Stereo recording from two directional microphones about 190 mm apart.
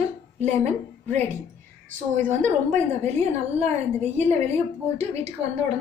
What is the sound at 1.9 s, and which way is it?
A woman's voice, 40° right (ahead or behind).